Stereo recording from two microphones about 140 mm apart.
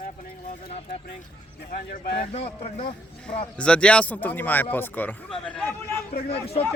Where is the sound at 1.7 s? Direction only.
90° left.